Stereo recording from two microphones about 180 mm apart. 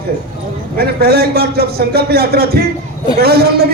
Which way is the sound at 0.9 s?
60° right (ahead or behind).